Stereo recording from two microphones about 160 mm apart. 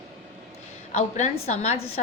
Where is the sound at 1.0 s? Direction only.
50° left (ahead or behind).